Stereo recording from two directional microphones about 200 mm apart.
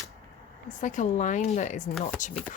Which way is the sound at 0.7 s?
40° left (ahead or behind).